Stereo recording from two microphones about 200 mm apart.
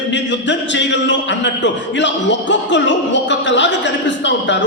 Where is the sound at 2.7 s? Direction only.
65° left (ahead or behind).